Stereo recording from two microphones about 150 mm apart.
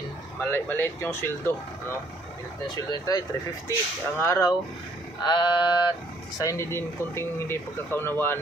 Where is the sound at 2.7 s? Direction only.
25° left (ahead or behind).